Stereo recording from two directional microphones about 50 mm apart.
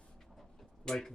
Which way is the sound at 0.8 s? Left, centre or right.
Centre.